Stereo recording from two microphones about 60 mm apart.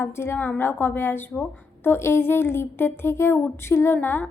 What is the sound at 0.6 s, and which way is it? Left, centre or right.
A woman's voice, left.